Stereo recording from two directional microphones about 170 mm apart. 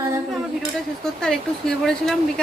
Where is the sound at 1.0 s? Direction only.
5° left (ahead or behind).